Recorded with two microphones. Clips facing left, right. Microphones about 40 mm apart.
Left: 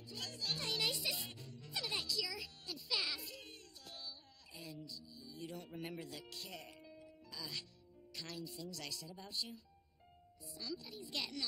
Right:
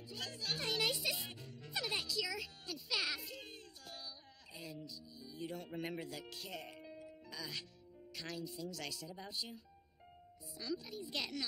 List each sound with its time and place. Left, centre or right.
0.0 s music: centre
1.0 s speech: centre
7.1 s music: centre
8.1 s speech: centre